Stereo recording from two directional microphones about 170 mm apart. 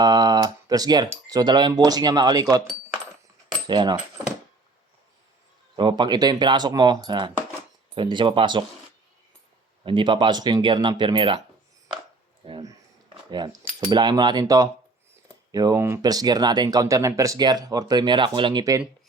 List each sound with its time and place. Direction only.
0.0 s speech: 25° right (ahead or behind)
3.7 s speech: 25° right (ahead or behind)
5.7 s speech: 30° right (ahead or behind)
9.8 s speech: 30° right (ahead or behind)
12.4 s a sound: 35° right (ahead or behind)
13.3 s speech: 25° right (ahead or behind)